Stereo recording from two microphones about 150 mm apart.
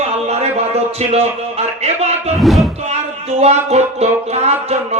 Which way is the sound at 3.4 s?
45° right (ahead or behind).